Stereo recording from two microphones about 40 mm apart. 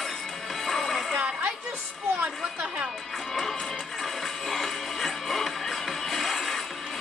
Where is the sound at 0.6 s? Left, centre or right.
Centre.